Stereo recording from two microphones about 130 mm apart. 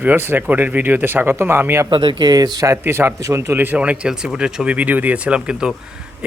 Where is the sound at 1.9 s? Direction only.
35° right (ahead or behind).